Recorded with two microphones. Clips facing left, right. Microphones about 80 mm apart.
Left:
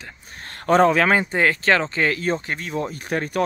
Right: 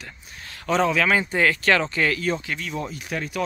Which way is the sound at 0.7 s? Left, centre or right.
Left.